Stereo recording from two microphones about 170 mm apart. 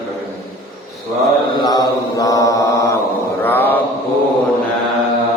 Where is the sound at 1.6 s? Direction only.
20° left (ahead or behind).